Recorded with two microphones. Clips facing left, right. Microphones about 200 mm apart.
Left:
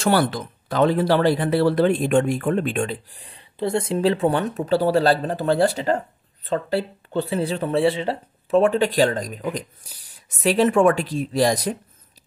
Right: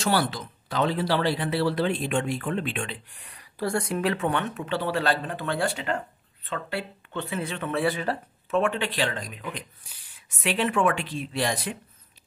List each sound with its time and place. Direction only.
0.0 s speech: 50° left (ahead or behind)